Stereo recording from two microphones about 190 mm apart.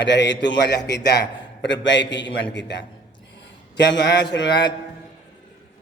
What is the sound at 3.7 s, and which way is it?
Speech, 65° left (ahead or behind).